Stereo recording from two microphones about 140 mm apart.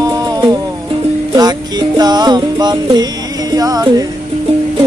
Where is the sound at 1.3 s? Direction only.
30° right (ahead or behind).